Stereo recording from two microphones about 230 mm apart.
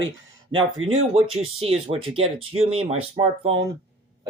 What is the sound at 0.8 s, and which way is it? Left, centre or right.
Speech, right.